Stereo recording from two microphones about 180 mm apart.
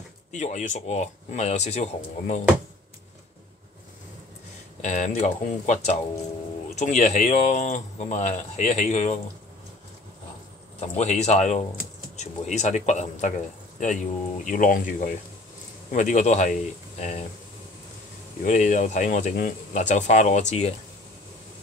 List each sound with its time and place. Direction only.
0.3 s speech: 40° left (ahead or behind)
4.8 s speech: 40° left (ahead or behind)
10.8 s speech: 40° left (ahead or behind)
18.4 s speech: 45° left (ahead or behind)